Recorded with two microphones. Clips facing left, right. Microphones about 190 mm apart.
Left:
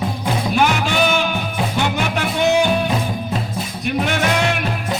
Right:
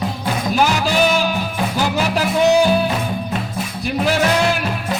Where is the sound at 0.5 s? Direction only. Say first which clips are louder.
Right 1 dB; 35° right (ahead or behind).